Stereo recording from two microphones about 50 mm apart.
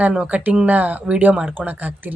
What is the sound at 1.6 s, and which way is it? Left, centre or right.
Speech, right.